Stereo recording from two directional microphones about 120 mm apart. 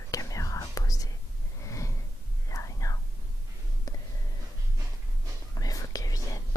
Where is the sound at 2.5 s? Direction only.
25° left (ahead or behind).